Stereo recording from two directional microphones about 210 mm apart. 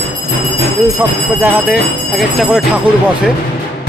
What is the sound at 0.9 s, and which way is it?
Speech, 10° right (ahead or behind).